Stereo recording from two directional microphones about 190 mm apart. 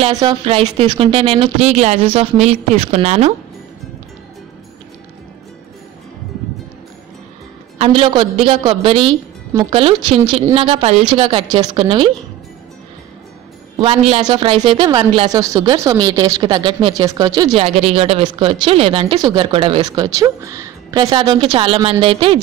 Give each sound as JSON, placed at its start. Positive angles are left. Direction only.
{"t": 0.1, "sound": "speech", "side_deg": -20}
{"t": 7.8, "sound": "speech", "side_deg": -30}
{"t": 13.7, "sound": "speech", "side_deg": -30}